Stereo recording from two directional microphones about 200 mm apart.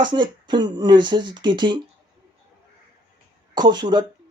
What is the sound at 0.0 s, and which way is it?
Speech, 20° right (ahead or behind).